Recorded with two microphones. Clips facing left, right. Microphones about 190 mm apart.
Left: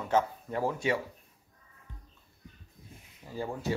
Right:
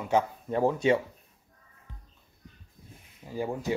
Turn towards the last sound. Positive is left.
turn(degrees=-15)  # may be behind; listen again after turning